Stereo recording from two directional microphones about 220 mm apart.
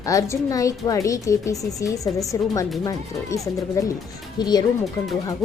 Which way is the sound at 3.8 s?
15° left (ahead or behind).